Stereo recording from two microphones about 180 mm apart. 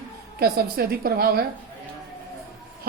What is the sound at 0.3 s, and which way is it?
A woman's voice, 60° right (ahead or behind).